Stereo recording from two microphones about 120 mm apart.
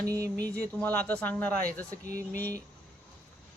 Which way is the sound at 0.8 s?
15° left (ahead or behind).